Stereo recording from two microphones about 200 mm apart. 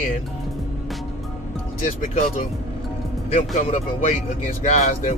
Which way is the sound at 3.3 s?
35° left (ahead or behind).